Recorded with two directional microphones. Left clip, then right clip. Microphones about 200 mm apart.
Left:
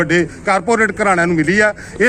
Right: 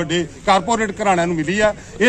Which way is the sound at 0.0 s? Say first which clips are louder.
Left 5 dB; 10° right (ahead or behind).